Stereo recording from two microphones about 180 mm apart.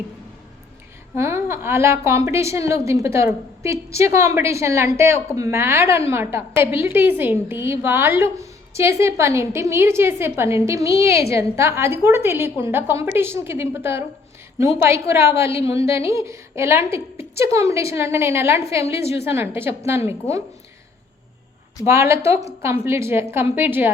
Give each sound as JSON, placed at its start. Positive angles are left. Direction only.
{"t": 1.1, "sound": "a woman's voice", "side_deg": -15}
{"t": 21.8, "sound": "a woman's voice", "side_deg": -15}